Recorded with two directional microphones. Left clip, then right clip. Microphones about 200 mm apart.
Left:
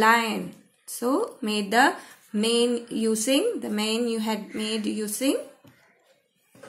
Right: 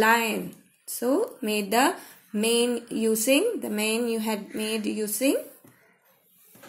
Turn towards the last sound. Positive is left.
turn(degrees=10)  # may be behind; listen again after turning